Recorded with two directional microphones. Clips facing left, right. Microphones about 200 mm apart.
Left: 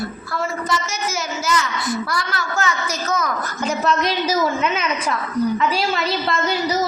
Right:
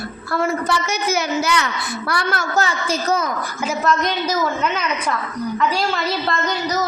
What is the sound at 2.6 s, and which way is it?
Speech, 30° right (ahead or behind).